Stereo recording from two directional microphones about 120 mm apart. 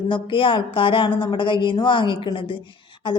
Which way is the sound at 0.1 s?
45° left (ahead or behind).